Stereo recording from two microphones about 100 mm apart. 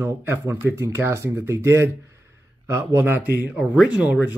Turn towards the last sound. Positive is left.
turn(degrees=-10)  # may be behind; listen again after turning